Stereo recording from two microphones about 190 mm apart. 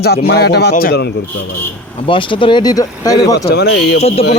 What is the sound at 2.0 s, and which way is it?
Speech, 25° left (ahead or behind).